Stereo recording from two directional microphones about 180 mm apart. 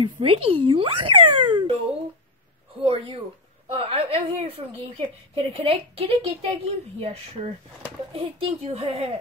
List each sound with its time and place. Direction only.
0.0 s a woman's voice: 30° right (ahead or behind)
2.8 s a woman's voice: 30° right (ahead or behind)